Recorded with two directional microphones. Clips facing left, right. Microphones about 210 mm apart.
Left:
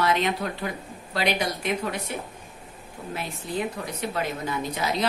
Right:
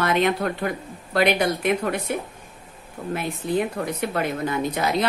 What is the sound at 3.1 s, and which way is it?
A woman's voice, 55° right (ahead or behind).